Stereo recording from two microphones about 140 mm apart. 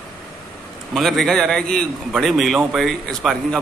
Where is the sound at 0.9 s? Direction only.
Centre (ahead or behind).